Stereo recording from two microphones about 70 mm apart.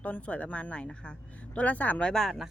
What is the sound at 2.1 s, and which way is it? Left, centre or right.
Speech, centre.